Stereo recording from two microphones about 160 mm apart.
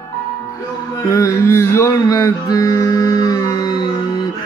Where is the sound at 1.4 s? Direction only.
15° left (ahead or behind).